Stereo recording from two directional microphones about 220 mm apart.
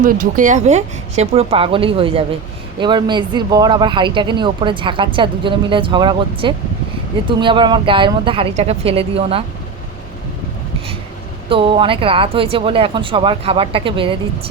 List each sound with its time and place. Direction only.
0.0 s speech: 35° right (ahead or behind)
11.4 s speech: 25° right (ahead or behind)